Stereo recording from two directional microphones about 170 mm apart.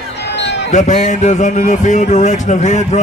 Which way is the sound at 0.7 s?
45° left (ahead or behind).